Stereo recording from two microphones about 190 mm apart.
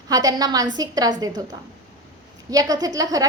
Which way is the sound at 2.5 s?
20° right (ahead or behind).